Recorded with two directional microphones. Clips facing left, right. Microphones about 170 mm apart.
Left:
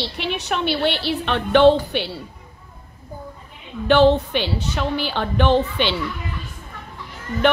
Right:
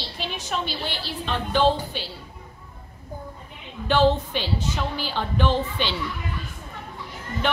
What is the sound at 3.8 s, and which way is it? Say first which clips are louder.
A woman's voice: left 5 dB; 65° left (ahead or behind).